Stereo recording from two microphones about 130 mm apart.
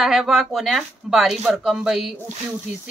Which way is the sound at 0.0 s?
5° right (ahead or behind).